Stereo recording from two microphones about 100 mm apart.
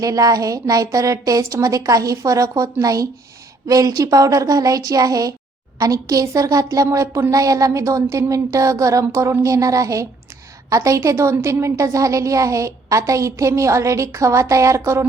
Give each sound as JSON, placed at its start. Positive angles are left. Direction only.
{"t": 0.0, "sound": "a woman's voice", "side_deg": -35}